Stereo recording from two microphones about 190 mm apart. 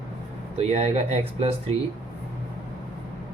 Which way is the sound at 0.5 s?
35° right (ahead or behind).